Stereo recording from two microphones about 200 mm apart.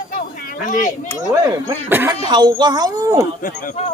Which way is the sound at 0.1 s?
45° left (ahead or behind).